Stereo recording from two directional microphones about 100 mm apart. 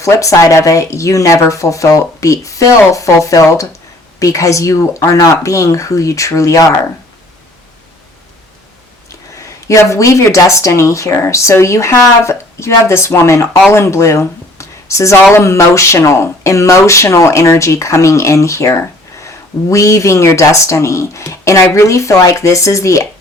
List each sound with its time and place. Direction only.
0.0 s speech: 30° left (ahead or behind)
9.0 s speech: 30° left (ahead or behind)